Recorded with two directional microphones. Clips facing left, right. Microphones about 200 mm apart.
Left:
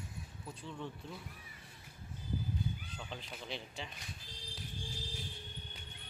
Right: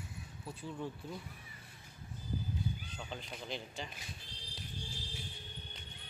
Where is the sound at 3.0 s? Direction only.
Centre (ahead or behind).